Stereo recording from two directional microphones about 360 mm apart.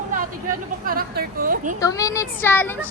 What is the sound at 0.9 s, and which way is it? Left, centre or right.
Speech, right.